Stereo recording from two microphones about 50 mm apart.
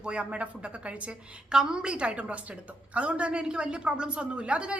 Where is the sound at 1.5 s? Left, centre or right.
Centre.